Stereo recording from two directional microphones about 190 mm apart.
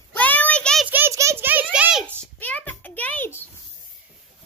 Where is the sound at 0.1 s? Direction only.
10° left (ahead or behind).